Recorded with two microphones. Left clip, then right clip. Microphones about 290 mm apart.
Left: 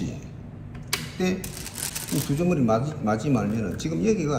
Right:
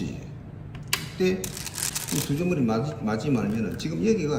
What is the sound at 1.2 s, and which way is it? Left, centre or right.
A man's voice, left.